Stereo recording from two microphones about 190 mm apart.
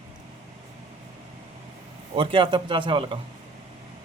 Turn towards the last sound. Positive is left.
turn(degrees=-25)  # may be behind; listen again after turning